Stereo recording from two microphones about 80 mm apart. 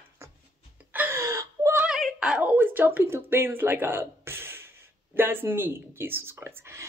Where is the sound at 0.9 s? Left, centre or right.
Right.